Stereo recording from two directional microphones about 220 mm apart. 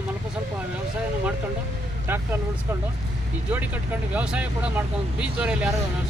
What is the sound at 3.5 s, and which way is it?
Speech, 5° right (ahead or behind).